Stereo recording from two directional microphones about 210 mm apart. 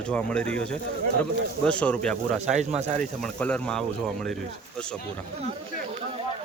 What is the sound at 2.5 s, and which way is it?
Speech, 35° right (ahead or behind).